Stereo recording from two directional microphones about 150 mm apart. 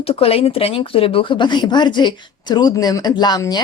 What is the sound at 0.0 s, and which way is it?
Speech, 40° left (ahead or behind).